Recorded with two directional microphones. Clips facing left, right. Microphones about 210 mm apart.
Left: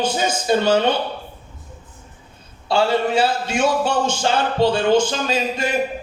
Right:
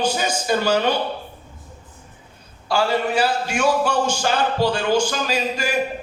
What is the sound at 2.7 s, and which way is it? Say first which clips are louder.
A man's voice: left 2 dB; 25° left (ahead or behind).